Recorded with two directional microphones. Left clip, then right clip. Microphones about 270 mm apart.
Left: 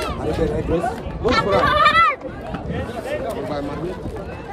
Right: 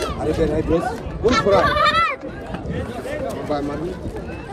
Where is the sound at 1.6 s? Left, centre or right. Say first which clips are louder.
Left 2 dB; left.